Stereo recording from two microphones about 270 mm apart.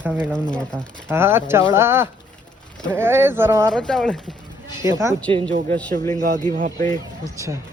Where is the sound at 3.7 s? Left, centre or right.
Centre.